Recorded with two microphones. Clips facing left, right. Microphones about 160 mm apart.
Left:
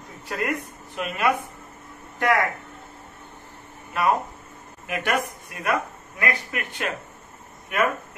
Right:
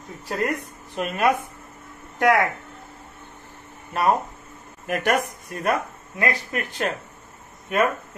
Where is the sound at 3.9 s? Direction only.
35° right (ahead or behind).